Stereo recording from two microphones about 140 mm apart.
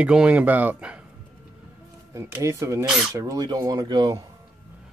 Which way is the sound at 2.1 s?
20° right (ahead or behind).